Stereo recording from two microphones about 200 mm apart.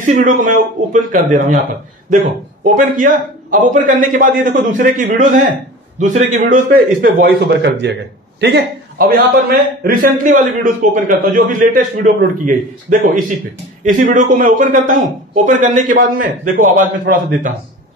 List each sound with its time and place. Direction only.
0.0 s a man's voice: 40° right (ahead or behind)
2.6 s a man's voice: 40° right (ahead or behind)